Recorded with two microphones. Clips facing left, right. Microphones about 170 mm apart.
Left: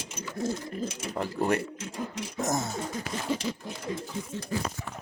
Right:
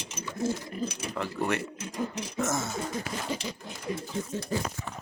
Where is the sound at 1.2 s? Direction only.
35° left (ahead or behind).